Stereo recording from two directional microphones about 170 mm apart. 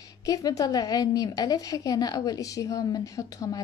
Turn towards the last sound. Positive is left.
turn(degrees=20)  # may be behind; listen again after turning